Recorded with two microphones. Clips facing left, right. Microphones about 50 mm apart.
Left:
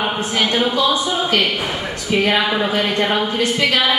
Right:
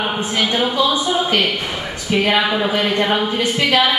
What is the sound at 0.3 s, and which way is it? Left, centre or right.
Music, centre.